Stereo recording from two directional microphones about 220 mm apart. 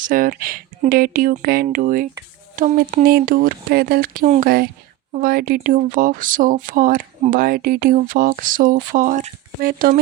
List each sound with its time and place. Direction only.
0.1 s speech: 40° right (ahead or behind)